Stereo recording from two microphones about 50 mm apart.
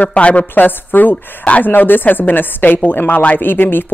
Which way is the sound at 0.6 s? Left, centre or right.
Left.